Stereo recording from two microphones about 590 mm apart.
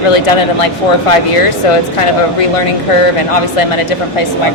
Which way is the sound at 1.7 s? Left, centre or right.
Left.